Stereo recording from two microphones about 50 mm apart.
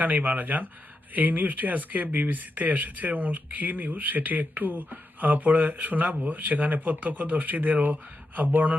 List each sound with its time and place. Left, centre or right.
0.0 s speech: right